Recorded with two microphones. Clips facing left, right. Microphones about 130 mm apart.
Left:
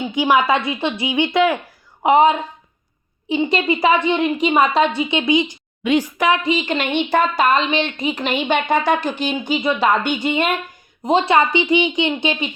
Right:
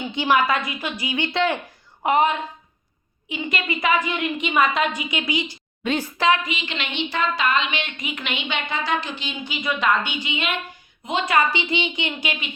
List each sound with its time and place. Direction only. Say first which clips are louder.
0.0 s a woman's voice: left 4 dB; 15° left (ahead or behind)
0.4 s a woman's voice: left 5 dB; 25° left (ahead or behind)
2.0 s a woman's voice: left 6 dB; 25° left (ahead or behind)
6.5 s a woman's voice: left 11 dB; 40° left (ahead or behind)
11.0 s a woman's voice: left 6 dB; 35° left (ahead or behind)
11.5 s a woman's voice: left 8 dB; 15° left (ahead or behind)